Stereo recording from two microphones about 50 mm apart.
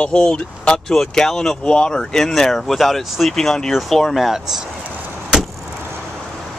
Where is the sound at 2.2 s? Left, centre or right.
Centre.